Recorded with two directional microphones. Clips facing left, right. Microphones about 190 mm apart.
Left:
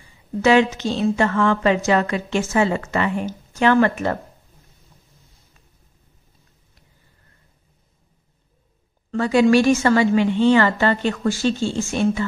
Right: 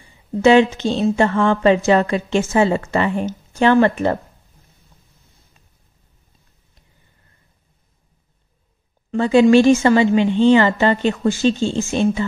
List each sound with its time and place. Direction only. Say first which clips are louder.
0.4 s a woman's voice: right 4 dB; 25° right (ahead or behind)
9.1 s a woman's voice: right 4 dB; 25° right (ahead or behind)